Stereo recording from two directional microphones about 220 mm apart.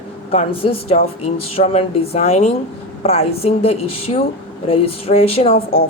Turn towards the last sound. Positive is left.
turn(degrees=25)  # may be behind; listen again after turning